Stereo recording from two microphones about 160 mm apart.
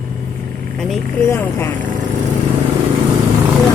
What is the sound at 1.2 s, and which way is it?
Speech, 15° left (ahead or behind).